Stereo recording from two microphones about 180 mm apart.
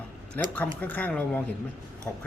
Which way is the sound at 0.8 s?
10° left (ahead or behind).